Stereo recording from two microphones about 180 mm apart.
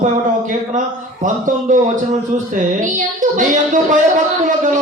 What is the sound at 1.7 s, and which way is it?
Speech, 45° right (ahead or behind).